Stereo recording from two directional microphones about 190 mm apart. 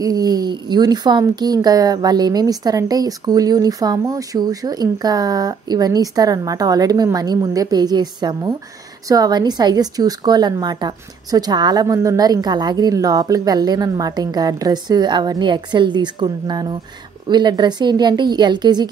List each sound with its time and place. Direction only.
0.0 s a woman's voice: 20° right (ahead or behind)